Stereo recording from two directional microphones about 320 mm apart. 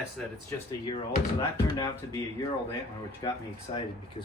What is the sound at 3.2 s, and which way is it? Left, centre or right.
Speech, centre.